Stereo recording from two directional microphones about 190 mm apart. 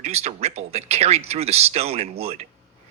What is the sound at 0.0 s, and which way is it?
Speech, 35° right (ahead or behind).